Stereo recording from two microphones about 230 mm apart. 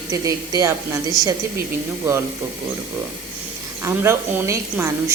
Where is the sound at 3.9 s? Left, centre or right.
Centre.